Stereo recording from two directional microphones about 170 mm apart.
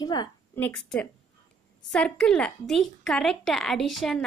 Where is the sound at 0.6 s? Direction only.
5° left (ahead or behind).